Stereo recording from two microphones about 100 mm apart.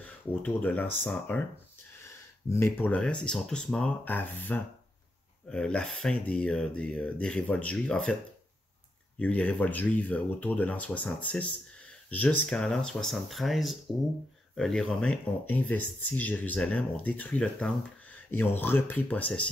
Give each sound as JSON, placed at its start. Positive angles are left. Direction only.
{"t": 0.0, "sound": "speech", "side_deg": 15}
{"t": 2.0, "sound": "a sound", "side_deg": 25}
{"t": 2.9, "sound": "speech", "side_deg": 10}
{"t": 9.2, "sound": "speech", "side_deg": 15}
{"t": 18.3, "sound": "speech", "side_deg": 20}